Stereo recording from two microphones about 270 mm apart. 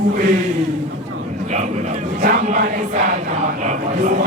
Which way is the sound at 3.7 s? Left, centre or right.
Right.